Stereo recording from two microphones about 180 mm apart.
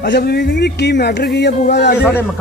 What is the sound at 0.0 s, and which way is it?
Speech, 65° left (ahead or behind).